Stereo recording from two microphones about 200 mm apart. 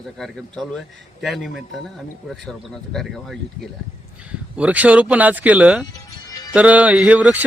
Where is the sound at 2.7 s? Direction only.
Centre (ahead or behind).